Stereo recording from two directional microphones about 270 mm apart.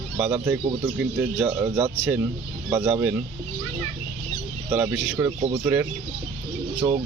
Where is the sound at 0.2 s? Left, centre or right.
Centre.